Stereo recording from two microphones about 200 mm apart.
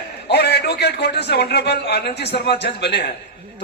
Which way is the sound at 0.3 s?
55° left (ahead or behind).